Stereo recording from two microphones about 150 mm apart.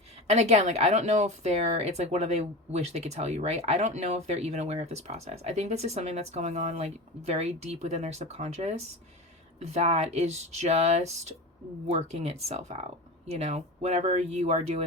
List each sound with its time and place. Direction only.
0.3 s a woman's voice: 45° right (ahead or behind)